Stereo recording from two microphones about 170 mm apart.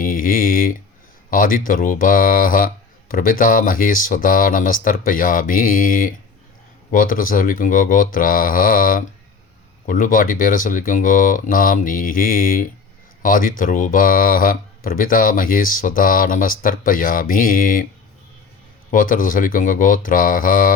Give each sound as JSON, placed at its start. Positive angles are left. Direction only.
{"t": 0.0, "sound": "a sound", "side_deg": 55}
{"t": 1.3, "sound": "speech", "side_deg": 55}
{"t": 18.9, "sound": "speech", "side_deg": 50}